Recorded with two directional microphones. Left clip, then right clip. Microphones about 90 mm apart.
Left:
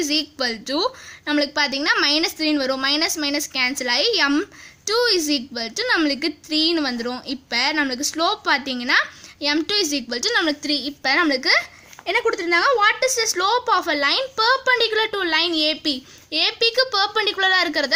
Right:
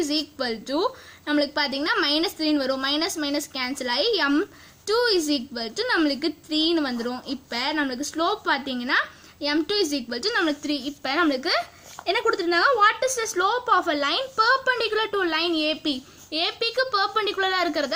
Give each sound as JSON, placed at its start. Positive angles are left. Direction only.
{"t": 0.0, "sound": "a child's voice", "side_deg": 30}